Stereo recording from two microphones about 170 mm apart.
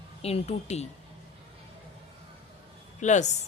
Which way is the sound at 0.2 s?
35° left (ahead or behind).